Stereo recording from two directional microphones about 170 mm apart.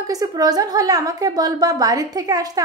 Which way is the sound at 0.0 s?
20° right (ahead or behind).